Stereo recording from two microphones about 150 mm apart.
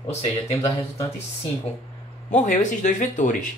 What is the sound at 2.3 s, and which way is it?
Speech, 55° left (ahead or behind).